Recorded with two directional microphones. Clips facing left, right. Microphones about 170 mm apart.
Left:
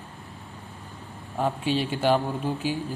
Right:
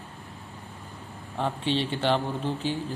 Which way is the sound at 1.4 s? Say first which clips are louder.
Left 2 dB; 10° left (ahead or behind).